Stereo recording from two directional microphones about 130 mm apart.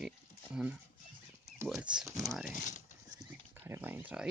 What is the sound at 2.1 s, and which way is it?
Speech, 25° right (ahead or behind).